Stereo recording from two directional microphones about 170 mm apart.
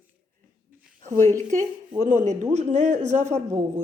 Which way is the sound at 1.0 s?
50° right (ahead or behind).